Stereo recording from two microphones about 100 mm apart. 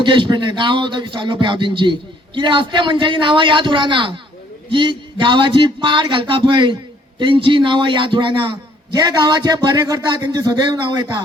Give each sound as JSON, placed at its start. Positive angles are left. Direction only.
{"t": 0.0, "sound": "a man's voice", "side_deg": -50}
{"t": 9.0, "sound": "speech", "side_deg": -45}